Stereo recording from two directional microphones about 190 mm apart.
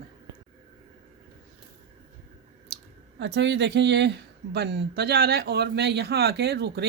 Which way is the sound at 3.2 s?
65° right (ahead or behind).